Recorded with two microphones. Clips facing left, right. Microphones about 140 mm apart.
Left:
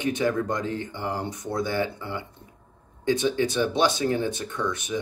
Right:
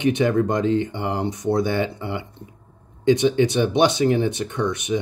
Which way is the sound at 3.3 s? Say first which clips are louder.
Right 5 dB; 20° right (ahead or behind).